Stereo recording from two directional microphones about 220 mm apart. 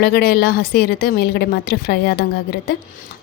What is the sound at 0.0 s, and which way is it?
A woman's voice, 45° left (ahead or behind).